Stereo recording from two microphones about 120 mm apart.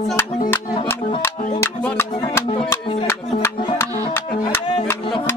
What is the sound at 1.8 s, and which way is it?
Music, 20° left (ahead or behind).